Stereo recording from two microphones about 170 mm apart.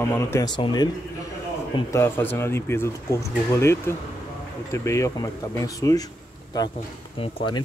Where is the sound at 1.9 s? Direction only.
15° left (ahead or behind).